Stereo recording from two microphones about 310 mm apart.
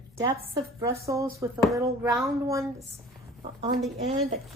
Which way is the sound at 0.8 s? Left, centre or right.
Centre.